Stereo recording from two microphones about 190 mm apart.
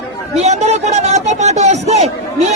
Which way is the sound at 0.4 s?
35° right (ahead or behind).